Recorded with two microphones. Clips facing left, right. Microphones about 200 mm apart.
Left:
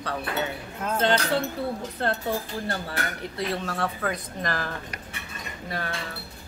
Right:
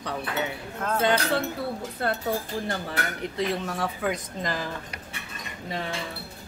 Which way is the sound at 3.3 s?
15° right (ahead or behind).